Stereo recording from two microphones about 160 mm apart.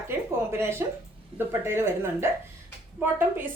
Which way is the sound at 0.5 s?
15° right (ahead or behind).